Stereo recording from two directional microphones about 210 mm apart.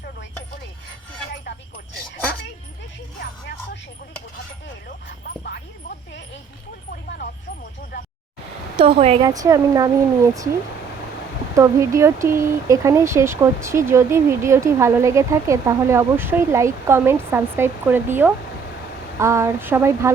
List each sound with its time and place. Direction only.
5.4 s a sound: 50° left (ahead or behind)
8.8 s speech: 30° right (ahead or behind)
9.2 s speech: 15° right (ahead or behind)
11.5 s speech: 15° right (ahead or behind)